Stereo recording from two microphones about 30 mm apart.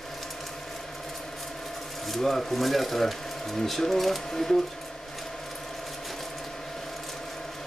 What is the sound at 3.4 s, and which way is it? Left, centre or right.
Speech, centre.